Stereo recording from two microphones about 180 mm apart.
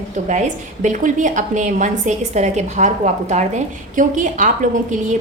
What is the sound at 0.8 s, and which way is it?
A woman's voice, 45° right (ahead or behind).